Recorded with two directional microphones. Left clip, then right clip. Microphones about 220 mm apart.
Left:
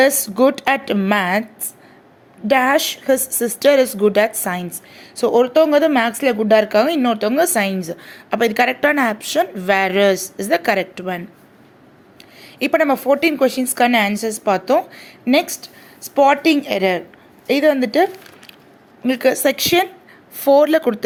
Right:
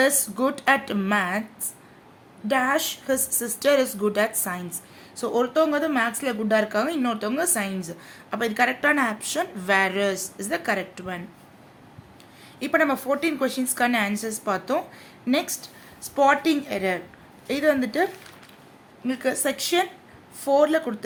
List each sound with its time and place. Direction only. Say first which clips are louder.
0.0 s a woman's voice: left 8 dB; 25° left (ahead or behind)
2.5 s a woman's voice: left 8 dB; 30° left (ahead or behind)
12.4 s a woman's voice: left 6 dB; 25° left (ahead or behind)